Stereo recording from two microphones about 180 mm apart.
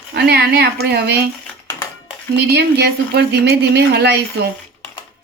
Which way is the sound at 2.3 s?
65° right (ahead or behind).